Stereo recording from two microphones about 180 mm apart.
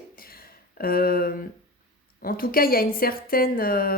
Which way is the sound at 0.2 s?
55° left (ahead or behind).